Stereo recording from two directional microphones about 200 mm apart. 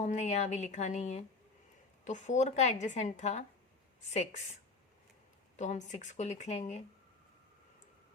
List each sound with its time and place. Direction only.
0.0 s a woman's voice: 35° left (ahead or behind)
5.5 s a woman's voice: 35° left (ahead or behind)